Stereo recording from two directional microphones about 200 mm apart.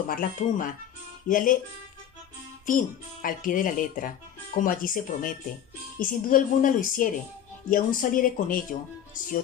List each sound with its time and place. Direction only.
0.1 s speech: 45° left (ahead or behind)
2.6 s speech: 45° left (ahead or behind)